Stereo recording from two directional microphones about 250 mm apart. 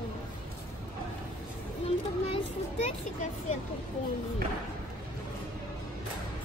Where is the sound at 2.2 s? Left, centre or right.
Left.